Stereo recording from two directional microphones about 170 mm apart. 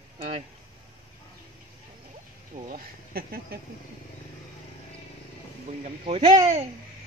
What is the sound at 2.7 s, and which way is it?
Speech, 65° right (ahead or behind).